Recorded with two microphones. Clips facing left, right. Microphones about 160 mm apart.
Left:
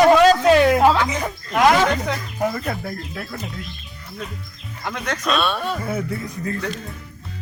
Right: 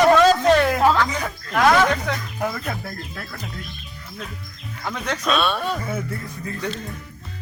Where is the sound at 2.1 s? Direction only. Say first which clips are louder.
Left 3 dB; 5° left (ahead or behind).